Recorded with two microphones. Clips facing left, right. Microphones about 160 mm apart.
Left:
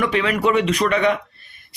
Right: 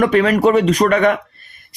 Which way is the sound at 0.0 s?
45° right (ahead or behind).